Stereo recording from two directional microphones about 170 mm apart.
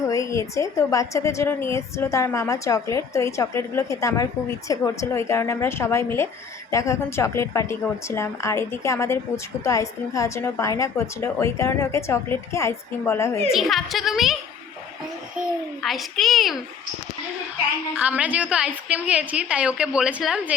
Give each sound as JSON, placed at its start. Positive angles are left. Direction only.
{"t": 0.1, "sound": "a woman's voice", "side_deg": 20}
{"t": 13.5, "sound": "a woman's voice", "side_deg": 0}
{"t": 15.8, "sound": "a woman's voice", "side_deg": 0}
{"t": 17.9, "sound": "a woman's voice", "side_deg": -10}